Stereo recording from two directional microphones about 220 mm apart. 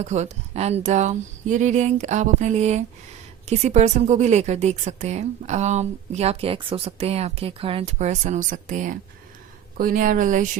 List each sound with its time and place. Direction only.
0.0 s a woman's voice: 30° right (ahead or behind)